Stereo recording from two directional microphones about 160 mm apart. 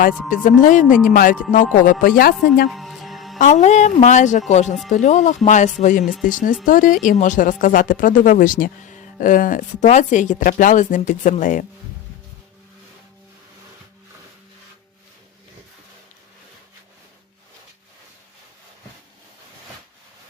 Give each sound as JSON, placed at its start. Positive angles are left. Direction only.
{"t": 0.0, "sound": "speech", "side_deg": 55}
{"t": 2.7, "sound": "music", "side_deg": 0}
{"t": 3.3, "sound": "speech", "side_deg": 50}
{"t": 9.8, "sound": "speech", "side_deg": 45}